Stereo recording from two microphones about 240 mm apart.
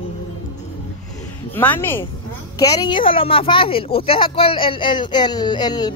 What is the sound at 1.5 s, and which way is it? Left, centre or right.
Speech, centre.